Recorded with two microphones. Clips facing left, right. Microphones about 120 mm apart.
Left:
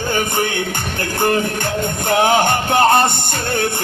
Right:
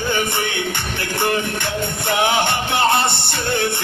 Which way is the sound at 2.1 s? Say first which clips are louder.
Left 4 dB; 40° left (ahead or behind).